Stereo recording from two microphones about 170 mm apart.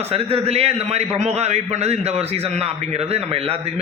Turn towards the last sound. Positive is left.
turn(degrees=-35)  # may be behind; listen again after turning